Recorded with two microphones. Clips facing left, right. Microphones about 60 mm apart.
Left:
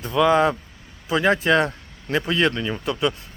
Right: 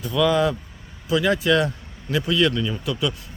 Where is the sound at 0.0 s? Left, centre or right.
Left.